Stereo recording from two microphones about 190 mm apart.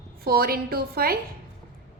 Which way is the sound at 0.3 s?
50° right (ahead or behind).